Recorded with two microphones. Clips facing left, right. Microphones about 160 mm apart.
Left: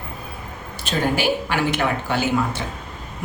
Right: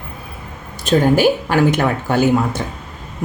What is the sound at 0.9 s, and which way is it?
A woman's voice, 45° right (ahead or behind).